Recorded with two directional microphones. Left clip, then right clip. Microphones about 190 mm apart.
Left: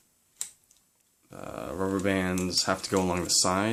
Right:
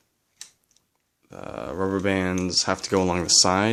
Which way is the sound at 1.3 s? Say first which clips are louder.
Right 4 dB; 40° right (ahead or behind).